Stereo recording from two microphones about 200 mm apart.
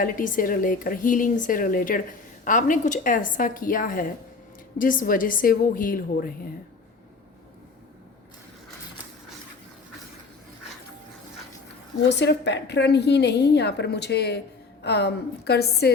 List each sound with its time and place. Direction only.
0.0 s speech: 45° left (ahead or behind)
12.0 s a woman's voice: 60° left (ahead or behind)